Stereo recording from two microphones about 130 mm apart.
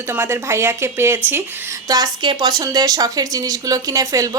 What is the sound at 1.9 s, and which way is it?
A woman's voice, 30° right (ahead or behind).